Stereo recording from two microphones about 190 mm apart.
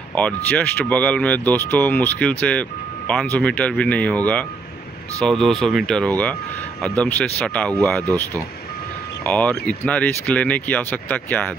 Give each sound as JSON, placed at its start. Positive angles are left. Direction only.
{"t": 0.1, "sound": "speech", "side_deg": 5}
{"t": 9.2, "sound": "speech", "side_deg": 5}